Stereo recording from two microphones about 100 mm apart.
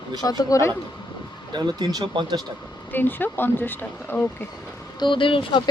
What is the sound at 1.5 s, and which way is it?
Speech, 45° right (ahead or behind).